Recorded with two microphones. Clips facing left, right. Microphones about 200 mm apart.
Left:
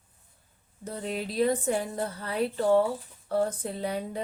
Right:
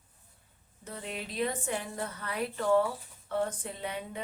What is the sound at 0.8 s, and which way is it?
A woman's voice, 40° left (ahead or behind).